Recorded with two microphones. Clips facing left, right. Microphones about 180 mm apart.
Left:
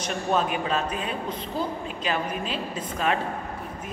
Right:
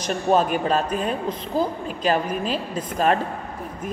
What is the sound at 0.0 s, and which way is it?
A woman's voice, 40° right (ahead or behind).